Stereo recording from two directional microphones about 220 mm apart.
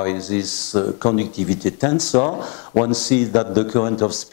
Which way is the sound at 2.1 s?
25° left (ahead or behind).